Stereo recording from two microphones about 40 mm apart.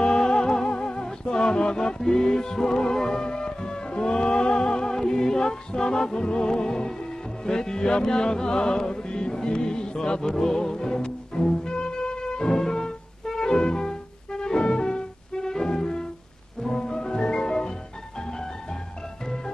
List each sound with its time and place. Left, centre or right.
0.0 s music: centre
2.0 s music: centre
19.2 s music: centre